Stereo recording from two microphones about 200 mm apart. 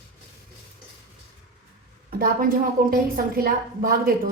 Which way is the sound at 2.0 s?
50° right (ahead or behind).